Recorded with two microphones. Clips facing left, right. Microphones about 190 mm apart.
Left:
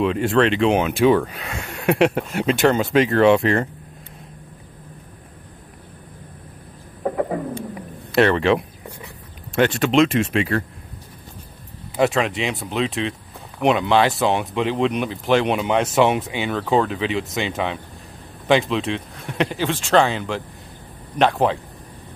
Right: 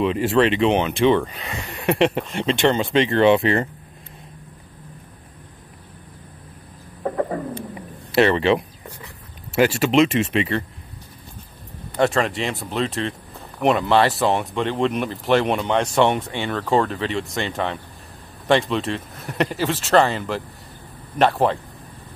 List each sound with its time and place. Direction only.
0.0 s speech: 5° right (ahead or behind)
7.0 s bird: 5° left (ahead or behind)
7.7 s a sound: centre (ahead or behind)
9.6 s speech: 5° right (ahead or behind)
12.0 s speech: centre (ahead or behind)